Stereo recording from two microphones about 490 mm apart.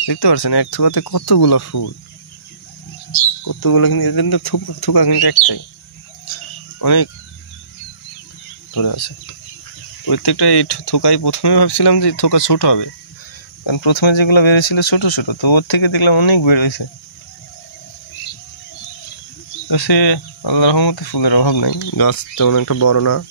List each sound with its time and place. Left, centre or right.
0.0 s speech: left
3.4 s speech: left
6.8 s speech: left
8.7 s speech: left
19.7 s speech: left
21.8 s speech: left